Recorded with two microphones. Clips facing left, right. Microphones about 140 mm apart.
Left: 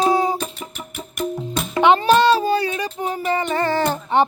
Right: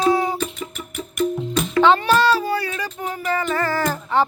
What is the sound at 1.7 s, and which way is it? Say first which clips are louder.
Music: left 2 dB; 20° left (ahead or behind).